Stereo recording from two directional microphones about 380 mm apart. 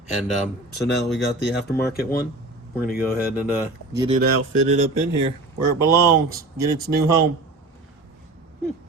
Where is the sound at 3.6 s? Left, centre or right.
Centre.